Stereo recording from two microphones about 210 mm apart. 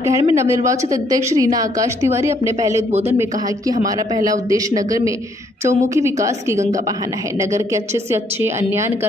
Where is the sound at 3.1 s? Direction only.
15° right (ahead or behind).